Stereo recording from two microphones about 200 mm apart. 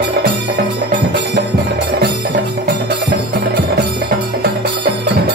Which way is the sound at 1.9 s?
55° right (ahead or behind).